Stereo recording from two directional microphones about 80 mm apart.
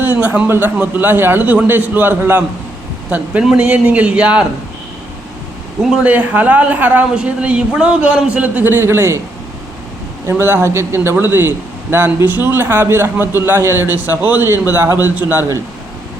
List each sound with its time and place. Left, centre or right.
0.0 s a sound: right
0.5 s a man's voice: right
3.6 s a woman's voice: centre
6.0 s a woman's voice: centre
10.2 s a man's voice: right